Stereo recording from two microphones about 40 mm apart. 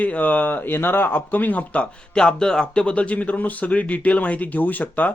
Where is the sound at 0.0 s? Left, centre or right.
Left.